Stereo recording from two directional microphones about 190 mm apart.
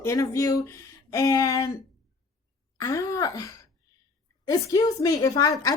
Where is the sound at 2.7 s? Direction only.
15° left (ahead or behind).